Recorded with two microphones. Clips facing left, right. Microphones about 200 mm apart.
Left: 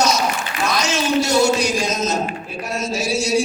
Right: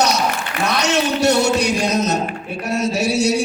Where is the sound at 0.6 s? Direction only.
65° right (ahead or behind).